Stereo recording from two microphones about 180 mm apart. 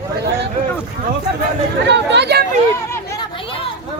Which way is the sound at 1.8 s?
75° right (ahead or behind).